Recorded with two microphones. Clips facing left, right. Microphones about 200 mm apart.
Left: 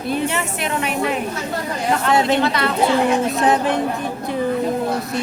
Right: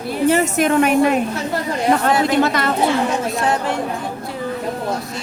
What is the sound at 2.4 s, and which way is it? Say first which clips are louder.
Speech: right 2 dB; 45° right (ahead or behind).